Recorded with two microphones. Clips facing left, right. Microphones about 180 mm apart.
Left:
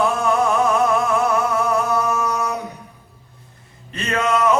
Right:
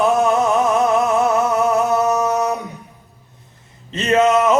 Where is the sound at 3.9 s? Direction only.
20° right (ahead or behind).